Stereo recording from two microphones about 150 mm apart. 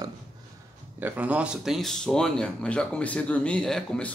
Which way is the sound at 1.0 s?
10° right (ahead or behind).